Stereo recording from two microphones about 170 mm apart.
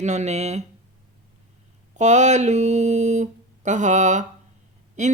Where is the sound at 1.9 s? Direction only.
40° right (ahead or behind).